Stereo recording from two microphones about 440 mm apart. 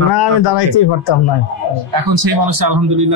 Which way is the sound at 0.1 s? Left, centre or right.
Left.